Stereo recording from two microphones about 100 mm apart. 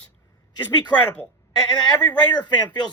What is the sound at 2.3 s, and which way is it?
Speech, 45° left (ahead or behind).